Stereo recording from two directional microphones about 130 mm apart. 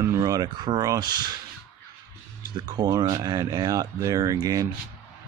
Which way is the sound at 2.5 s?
35° right (ahead or behind).